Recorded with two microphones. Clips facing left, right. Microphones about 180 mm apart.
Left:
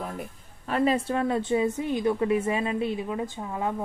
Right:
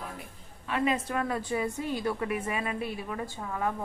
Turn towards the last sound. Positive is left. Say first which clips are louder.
# left 2 dB
turn(degrees=20)  # may be behind; listen again after turning